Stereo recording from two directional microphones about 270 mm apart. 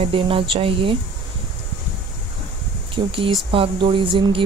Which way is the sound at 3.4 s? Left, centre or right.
Centre.